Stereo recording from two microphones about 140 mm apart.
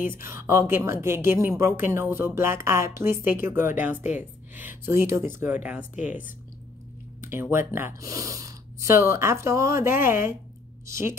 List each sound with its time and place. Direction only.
0.0 s a woman's voice: 15° right (ahead or behind)
7.2 s a sound: 20° right (ahead or behind)
7.5 s speech: 15° right (ahead or behind)